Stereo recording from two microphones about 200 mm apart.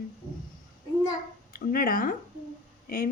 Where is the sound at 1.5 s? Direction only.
45° left (ahead or behind).